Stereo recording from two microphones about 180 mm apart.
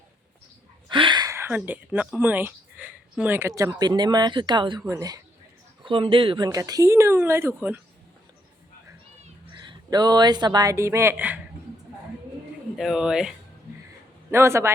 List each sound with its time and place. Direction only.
0.9 s speech: 25° right (ahead or behind)
5.8 s speech: 30° right (ahead or behind); by 7.8 s 10° right (ahead or behind)
9.6 s speech: 20° right (ahead or behind)
12.7 s speech: centre (ahead or behind)
14.3 s a man's voice: 15° right (ahead or behind)